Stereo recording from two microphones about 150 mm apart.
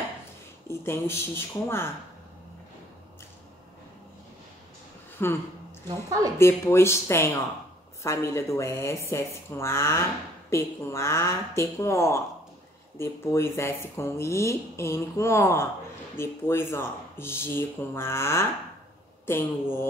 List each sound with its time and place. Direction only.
0.7 s speech: 15° left (ahead or behind)
5.2 s speech: 15° left (ahead or behind)
5.9 s a woman's voice: 20° right (ahead or behind)
6.3 s speech: 15° left (ahead or behind)